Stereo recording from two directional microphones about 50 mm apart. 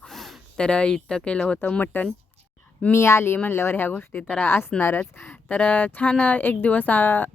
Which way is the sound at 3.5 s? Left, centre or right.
Left.